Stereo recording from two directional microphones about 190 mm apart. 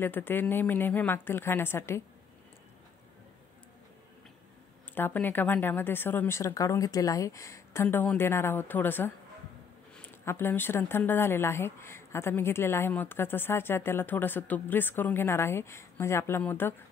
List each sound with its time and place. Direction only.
0.0 s speech: 10° left (ahead or behind)
4.9 s speech: 10° left (ahead or behind)